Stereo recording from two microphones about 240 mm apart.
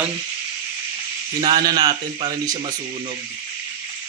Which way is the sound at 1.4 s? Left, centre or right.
Centre.